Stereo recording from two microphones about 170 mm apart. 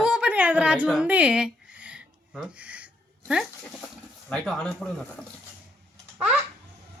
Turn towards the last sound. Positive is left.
turn(degrees=-5)  # may be behind; listen again after turning